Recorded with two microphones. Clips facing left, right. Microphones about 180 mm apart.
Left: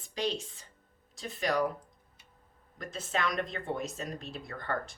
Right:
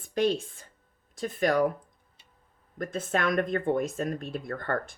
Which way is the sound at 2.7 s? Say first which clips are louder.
Right 6 dB; 50° right (ahead or behind).